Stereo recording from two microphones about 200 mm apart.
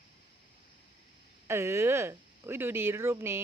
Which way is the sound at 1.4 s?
15° right (ahead or behind).